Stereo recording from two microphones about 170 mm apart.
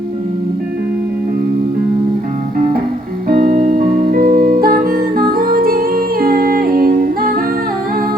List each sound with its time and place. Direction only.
3.2 s music: 60° right (ahead or behind)